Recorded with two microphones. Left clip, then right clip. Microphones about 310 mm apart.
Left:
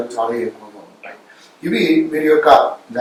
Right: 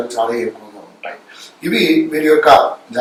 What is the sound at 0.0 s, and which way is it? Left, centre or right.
Speech, centre.